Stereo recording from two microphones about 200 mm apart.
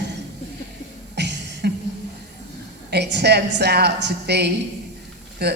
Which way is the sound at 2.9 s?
55° right (ahead or behind).